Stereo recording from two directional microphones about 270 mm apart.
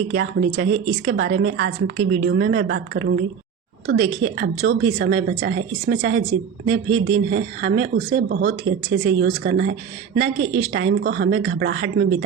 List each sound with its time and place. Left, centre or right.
0.1 s speech: right
7.3 s speech: right